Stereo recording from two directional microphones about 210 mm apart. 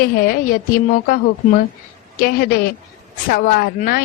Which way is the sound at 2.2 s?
45° left (ahead or behind).